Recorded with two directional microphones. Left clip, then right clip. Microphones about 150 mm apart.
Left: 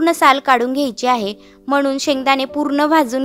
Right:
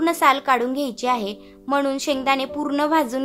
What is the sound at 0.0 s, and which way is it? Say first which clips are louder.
A woman's voice: left 5 dB; 50° left (ahead or behind).